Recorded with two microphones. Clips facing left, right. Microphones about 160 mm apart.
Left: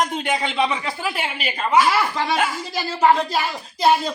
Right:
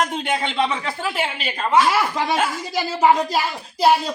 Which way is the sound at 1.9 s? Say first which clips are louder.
Right 1 dB; 10° right (ahead or behind).